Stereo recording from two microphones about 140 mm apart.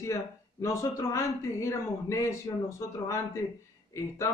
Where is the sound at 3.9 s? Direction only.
20° left (ahead or behind).